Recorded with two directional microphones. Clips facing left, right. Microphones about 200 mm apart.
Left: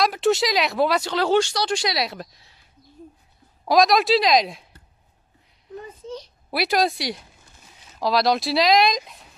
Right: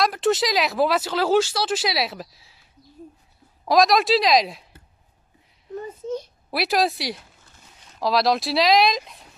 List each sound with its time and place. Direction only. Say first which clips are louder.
0.0 s speech: left 1 dB; centre (ahead or behind)
6.0 s a sound: right 7 dB; 50° right (ahead or behind)
6.5 s speech: even; centre (ahead or behind)